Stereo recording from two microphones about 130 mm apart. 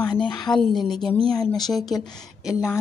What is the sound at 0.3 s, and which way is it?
Speech, 35° left (ahead or behind).